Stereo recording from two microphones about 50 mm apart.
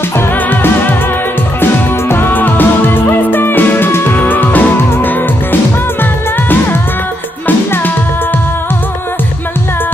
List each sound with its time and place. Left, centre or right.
1.6 s music: left